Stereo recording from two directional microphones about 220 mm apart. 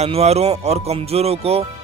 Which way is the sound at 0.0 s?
30° right (ahead or behind).